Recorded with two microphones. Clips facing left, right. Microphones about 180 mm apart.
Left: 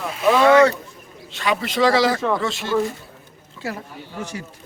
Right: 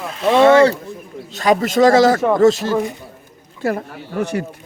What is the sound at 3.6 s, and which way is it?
Speech, 60° right (ahead or behind).